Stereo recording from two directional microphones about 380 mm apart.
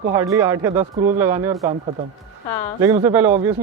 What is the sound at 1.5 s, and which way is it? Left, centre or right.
Speech, centre.